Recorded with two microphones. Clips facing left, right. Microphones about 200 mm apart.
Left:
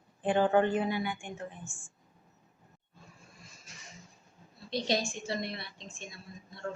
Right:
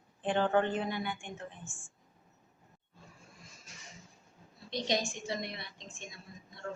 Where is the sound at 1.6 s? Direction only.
15° right (ahead or behind).